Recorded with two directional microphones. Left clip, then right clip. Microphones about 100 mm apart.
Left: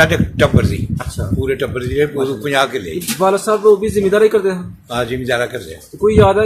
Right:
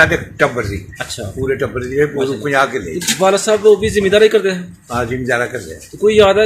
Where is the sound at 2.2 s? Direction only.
5° left (ahead or behind).